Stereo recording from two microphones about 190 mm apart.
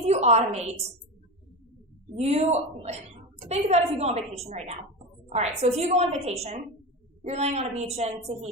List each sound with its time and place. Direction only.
0.0 s a woman's voice: 35° right (ahead or behind)
2.1 s a woman's voice: 35° right (ahead or behind)